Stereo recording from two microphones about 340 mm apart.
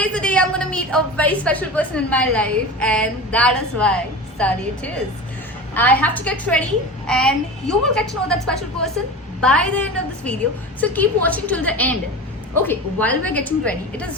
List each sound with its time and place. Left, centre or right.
0.0 s a woman's voice: centre